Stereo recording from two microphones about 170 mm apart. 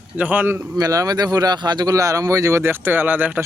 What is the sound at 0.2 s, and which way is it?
Speech, 10° right (ahead or behind).